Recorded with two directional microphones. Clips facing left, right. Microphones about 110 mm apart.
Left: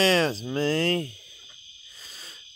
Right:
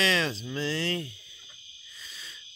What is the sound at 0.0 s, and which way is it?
Speech, 40° left (ahead or behind).